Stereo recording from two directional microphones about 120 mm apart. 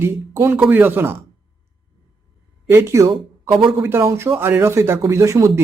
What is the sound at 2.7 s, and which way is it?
Speech, 20° right (ahead or behind).